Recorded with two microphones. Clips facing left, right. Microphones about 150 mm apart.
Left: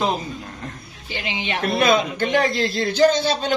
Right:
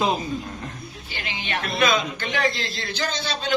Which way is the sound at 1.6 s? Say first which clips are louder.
Left 4 dB; 40° left (ahead or behind).